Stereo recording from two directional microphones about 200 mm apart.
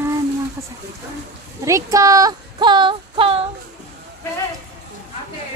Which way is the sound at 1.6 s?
15° right (ahead or behind).